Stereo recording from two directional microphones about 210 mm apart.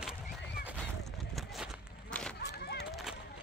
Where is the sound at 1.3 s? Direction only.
Centre (ahead or behind).